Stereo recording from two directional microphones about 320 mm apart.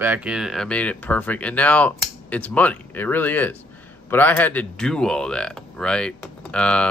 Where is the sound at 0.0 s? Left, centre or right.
Centre.